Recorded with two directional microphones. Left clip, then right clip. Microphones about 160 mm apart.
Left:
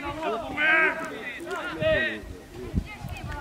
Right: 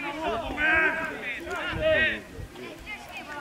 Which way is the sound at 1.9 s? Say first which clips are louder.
Even; 15° left (ahead or behind).